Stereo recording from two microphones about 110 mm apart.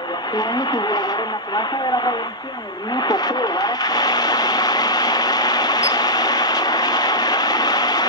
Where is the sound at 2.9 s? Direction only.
40° left (ahead or behind).